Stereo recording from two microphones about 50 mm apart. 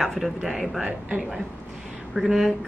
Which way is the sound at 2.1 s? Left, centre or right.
Centre.